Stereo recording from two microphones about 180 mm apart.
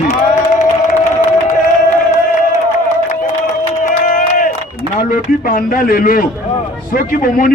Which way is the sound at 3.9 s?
45° left (ahead or behind).